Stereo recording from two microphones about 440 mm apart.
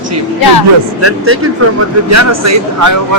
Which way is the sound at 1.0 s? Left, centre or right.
Right.